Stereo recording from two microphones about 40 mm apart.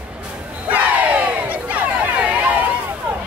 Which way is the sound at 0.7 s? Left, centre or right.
Right.